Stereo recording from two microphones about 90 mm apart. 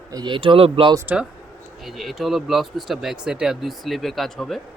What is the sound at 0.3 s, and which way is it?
Speech, 85° right.